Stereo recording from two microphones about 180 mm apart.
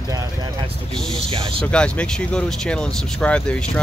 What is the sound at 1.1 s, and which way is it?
Speech, 30° right (ahead or behind).